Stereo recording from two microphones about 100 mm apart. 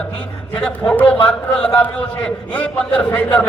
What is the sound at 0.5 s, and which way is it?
A man's voice, 10° left (ahead or behind).